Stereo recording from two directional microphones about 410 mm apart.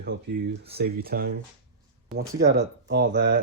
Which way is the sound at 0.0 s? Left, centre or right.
Right.